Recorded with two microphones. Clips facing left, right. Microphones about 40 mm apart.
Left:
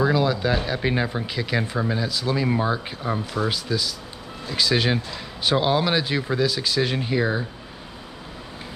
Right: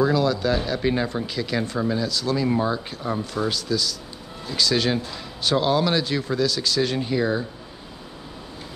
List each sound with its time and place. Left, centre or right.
0.0 s speech: centre